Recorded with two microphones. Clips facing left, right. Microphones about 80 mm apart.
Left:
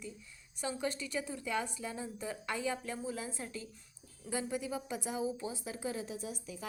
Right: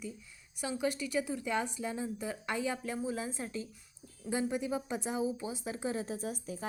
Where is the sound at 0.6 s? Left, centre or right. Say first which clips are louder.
Right 3 dB; centre.